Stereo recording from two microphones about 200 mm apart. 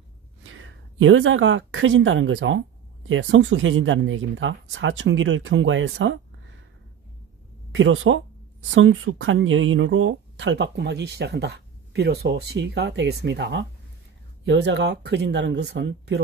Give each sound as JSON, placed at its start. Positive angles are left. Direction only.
{"t": 0.4, "sound": "a woman's voice", "side_deg": -80}
{"t": 7.7, "sound": "speech", "side_deg": -75}